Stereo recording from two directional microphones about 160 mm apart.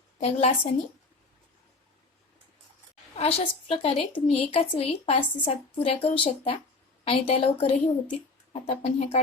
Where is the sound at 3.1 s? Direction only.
40° left (ahead or behind).